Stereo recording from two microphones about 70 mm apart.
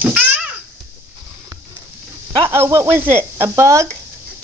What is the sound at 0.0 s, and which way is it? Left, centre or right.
Babbling, right.